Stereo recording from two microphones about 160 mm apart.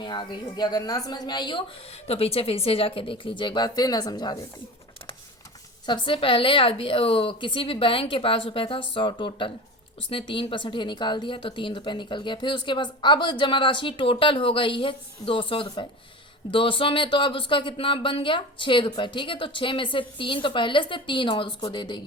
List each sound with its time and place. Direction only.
0.0 s a woman's voice: 30° left (ahead or behind)
5.8 s speech: 30° left (ahead or behind)